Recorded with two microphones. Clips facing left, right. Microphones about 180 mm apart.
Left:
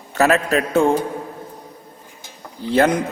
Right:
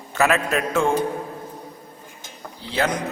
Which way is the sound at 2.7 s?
50° left (ahead or behind).